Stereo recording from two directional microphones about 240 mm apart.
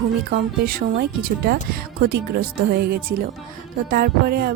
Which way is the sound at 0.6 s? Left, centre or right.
Right.